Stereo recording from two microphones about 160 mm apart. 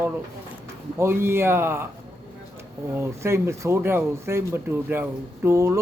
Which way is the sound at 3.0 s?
15° right (ahead or behind).